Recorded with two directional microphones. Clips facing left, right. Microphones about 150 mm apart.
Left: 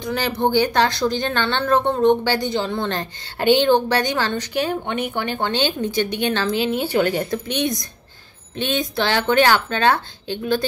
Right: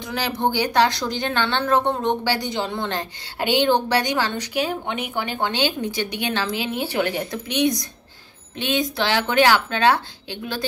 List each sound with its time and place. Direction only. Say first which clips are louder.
0.1 s a woman's voice: left 4 dB; 10° right (ahead or behind)